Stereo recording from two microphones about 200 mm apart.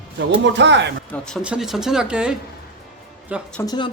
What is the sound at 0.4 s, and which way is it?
Speech, 60° right (ahead or behind).